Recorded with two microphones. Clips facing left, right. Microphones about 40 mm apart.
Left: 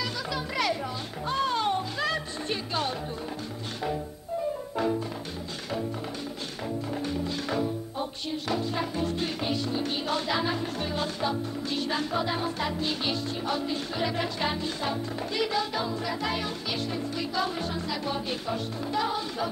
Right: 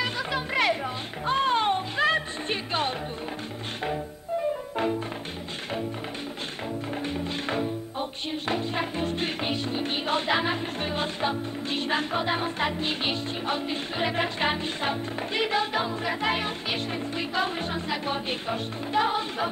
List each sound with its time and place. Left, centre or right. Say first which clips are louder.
0.0 s music: right 3 dB; right
7.1 s music: right 1 dB; right